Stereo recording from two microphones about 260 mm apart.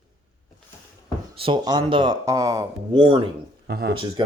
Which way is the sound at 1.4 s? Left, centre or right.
Centre.